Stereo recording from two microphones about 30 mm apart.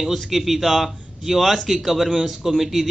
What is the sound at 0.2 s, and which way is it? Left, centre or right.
A man's voice, centre.